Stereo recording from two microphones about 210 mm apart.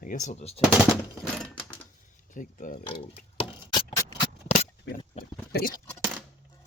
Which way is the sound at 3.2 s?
25° left (ahead or behind).